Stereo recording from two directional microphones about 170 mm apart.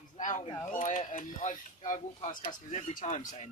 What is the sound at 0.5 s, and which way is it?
Speech, 15° left (ahead or behind).